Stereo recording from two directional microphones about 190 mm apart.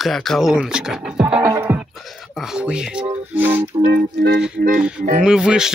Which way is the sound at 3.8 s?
65° right (ahead or behind).